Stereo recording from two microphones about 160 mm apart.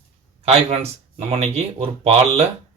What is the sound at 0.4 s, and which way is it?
Speech, 40° right (ahead or behind).